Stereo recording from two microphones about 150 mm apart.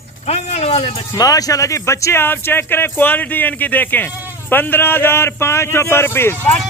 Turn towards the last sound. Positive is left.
turn(degrees=15)  # may be behind; listen again after turning